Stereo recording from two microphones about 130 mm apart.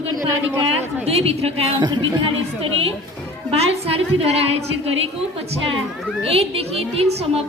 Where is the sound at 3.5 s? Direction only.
50° right (ahead or behind).